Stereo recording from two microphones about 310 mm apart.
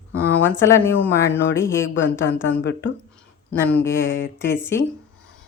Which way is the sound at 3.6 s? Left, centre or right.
Centre.